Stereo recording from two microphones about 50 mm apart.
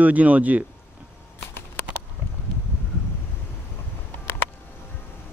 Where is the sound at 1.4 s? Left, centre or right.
Left.